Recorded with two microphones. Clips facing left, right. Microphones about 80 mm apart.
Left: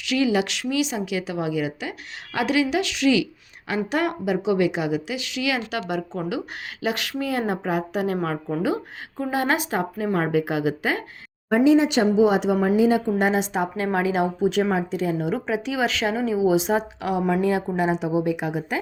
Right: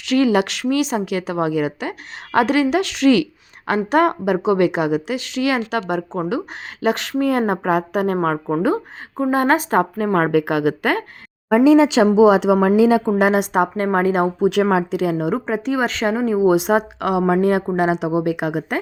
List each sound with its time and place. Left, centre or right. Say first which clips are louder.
0.0 s speech: right 5 dB; right
10.1 s a woman's voice: right 2 dB; right
12.0 s speech: right 5 dB; right
12.5 s a woman's voice: right 5 dB; right
13.4 s speech: right 6 dB; right
14.4 s speech: right 6 dB; right
15.4 s a woman's voice: right 4 dB; right